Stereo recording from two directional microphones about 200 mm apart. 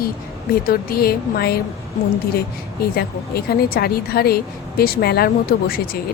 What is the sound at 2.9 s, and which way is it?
Speech, 50° left (ahead or behind).